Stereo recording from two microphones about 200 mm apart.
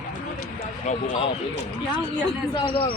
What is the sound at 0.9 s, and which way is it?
Speech, 35° left (ahead or behind).